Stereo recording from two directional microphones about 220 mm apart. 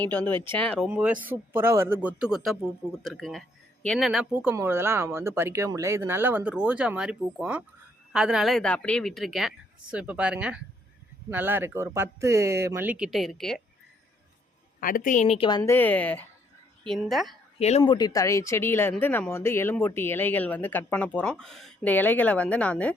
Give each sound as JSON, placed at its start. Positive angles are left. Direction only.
{"t": 0.6, "sound": "speech", "side_deg": 0}
{"t": 14.8, "sound": "a woman's voice", "side_deg": 40}
{"t": 17.6, "sound": "speech", "side_deg": 30}